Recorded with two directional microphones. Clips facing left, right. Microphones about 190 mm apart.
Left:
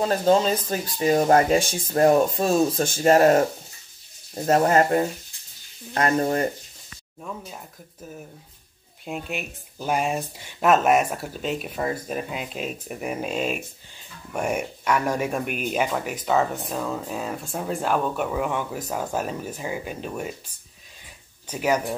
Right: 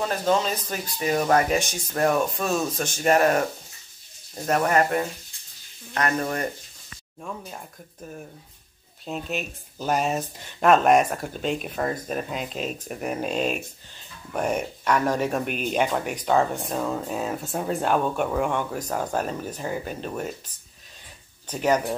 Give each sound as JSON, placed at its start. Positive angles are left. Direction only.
{"t": 0.0, "sound": "speech", "side_deg": 30}
{"t": 7.2, "sound": "speech", "side_deg": 0}